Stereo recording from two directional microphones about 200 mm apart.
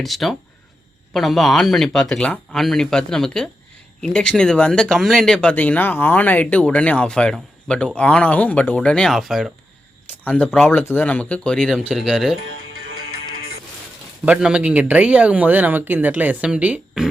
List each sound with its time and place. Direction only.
0.0 s speech: centre (ahead or behind)
12.5 s music: 90° right
14.3 s speech: 5° right (ahead or behind)